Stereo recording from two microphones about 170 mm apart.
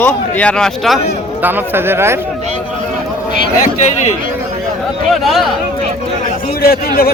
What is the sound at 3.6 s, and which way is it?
Speech, 45° left (ahead or behind).